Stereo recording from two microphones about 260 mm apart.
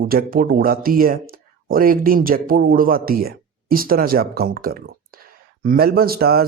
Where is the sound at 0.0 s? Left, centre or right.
Right.